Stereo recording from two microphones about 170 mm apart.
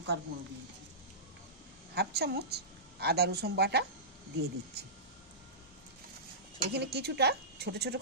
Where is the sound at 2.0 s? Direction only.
70° right (ahead or behind).